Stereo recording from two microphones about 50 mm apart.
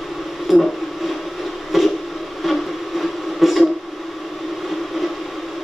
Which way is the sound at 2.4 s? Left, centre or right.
Centre.